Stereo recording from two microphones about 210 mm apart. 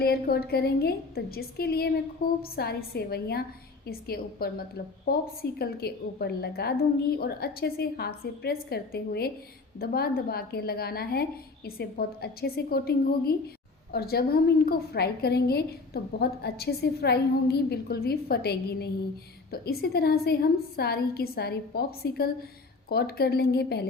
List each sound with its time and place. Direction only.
0.0 s a woman's voice: 50° left (ahead or behind)